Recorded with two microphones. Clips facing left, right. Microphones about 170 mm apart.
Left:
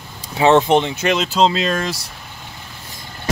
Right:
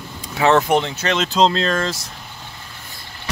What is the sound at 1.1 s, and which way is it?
Speech, 5° left (ahead or behind).